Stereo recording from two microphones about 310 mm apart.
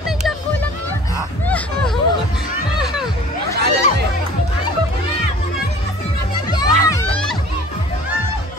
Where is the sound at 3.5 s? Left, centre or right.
Right.